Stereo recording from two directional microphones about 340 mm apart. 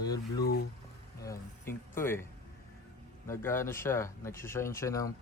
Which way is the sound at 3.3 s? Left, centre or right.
Centre.